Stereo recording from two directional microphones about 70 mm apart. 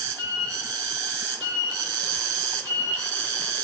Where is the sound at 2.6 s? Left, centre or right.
Left.